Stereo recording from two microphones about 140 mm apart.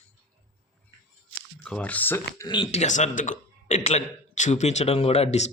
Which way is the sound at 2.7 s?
60° left (ahead or behind).